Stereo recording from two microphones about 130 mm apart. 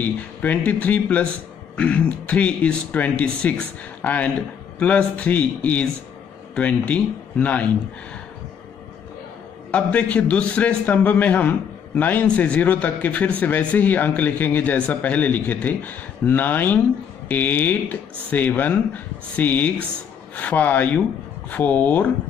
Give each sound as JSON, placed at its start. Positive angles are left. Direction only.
{"t": 0.4, "sound": "speech", "side_deg": 10}
{"t": 9.7, "sound": "speech", "side_deg": 10}